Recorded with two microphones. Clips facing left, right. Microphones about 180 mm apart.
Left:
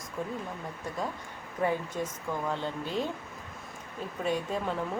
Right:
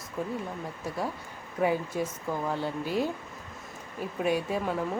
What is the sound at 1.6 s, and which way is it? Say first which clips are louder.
Speech: right 3 dB; 10° right (ahead or behind).